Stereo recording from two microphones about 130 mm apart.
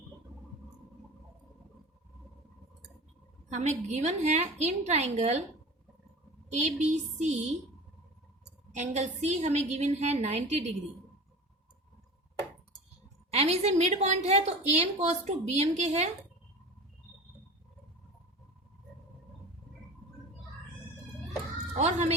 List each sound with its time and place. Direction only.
3.5 s a woman's voice: 60° right (ahead or behind)
6.5 s a woman's voice: 60° right (ahead or behind)
8.7 s a woman's voice: 60° right (ahead or behind)
13.3 s a woman's voice: 55° right (ahead or behind)
21.8 s speech: 60° right (ahead or behind)